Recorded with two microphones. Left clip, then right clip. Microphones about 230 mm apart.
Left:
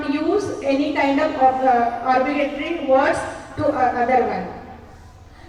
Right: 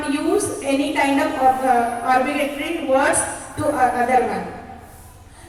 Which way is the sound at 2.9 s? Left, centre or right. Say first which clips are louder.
Left 1 dB; right.